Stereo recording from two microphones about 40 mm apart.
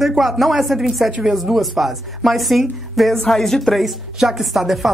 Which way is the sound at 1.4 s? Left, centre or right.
Centre.